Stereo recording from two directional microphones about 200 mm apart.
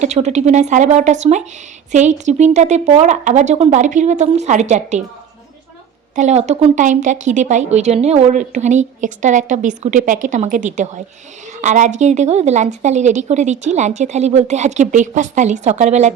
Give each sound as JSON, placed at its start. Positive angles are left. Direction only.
{"t": 0.0, "sound": "speech", "side_deg": -35}
{"t": 6.1, "sound": "speech", "side_deg": -35}